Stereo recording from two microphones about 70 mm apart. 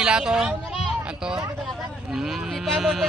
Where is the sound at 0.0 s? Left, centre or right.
Centre.